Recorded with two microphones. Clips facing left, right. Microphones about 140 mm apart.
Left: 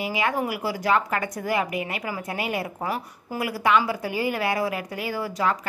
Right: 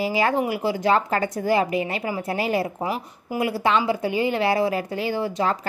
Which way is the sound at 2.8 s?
20° right (ahead or behind).